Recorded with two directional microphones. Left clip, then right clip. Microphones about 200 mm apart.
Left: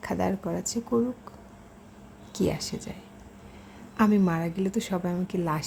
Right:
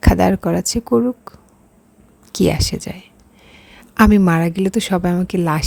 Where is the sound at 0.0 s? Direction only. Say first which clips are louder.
Right 13 dB; 45° right (ahead or behind).